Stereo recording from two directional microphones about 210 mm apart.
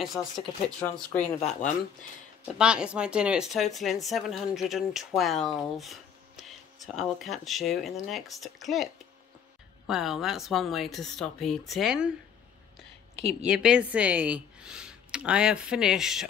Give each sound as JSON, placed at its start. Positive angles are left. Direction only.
{"t": 0.0, "sound": "speech", "side_deg": 0}
{"t": 1.4, "sound": "speech", "side_deg": 30}
{"t": 2.6, "sound": "speech", "side_deg": -5}
{"t": 9.8, "sound": "speech", "side_deg": 0}
{"t": 13.2, "sound": "speech", "side_deg": -30}
{"t": 13.5, "sound": "speech", "side_deg": -5}